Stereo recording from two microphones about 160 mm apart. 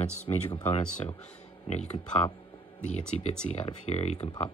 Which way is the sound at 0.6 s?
45° left (ahead or behind).